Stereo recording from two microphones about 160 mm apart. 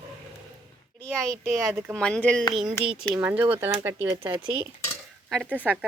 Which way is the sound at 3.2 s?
10° right (ahead or behind).